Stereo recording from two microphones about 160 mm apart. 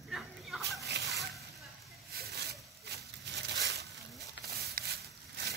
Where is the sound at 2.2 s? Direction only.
90° right.